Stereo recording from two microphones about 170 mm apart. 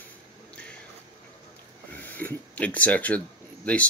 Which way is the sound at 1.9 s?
10° left (ahead or behind).